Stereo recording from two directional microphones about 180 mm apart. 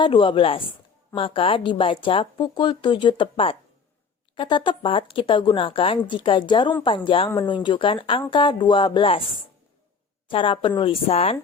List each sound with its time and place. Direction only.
0.0 s speech: 30° left (ahead or behind)
10.2 s a woman's voice: 30° left (ahead or behind)